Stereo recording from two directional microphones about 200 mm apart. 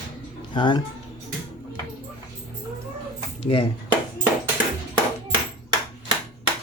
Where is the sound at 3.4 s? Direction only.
25° left (ahead or behind).